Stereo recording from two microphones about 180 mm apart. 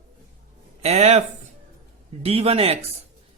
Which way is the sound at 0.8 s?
35° right (ahead or behind).